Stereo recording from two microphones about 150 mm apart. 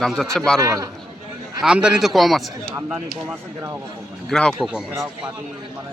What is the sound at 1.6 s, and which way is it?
Speech, 5° right (ahead or behind).